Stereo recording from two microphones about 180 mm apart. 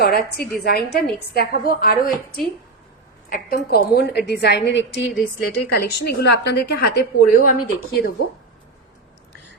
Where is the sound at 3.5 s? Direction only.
60° left (ahead or behind).